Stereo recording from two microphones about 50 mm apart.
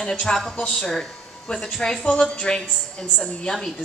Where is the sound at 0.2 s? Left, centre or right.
Centre.